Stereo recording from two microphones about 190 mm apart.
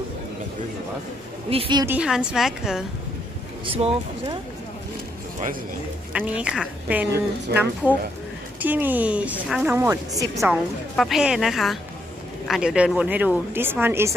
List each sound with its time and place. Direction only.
1.5 s speech: 30° right (ahead or behind)
1.9 s a woman's voice: 5° right (ahead or behind)
3.7 s speech: 30° right (ahead or behind)
6.1 s a woman's voice: 5° right (ahead or behind)
10.5 s a woman's voice: centre (ahead or behind)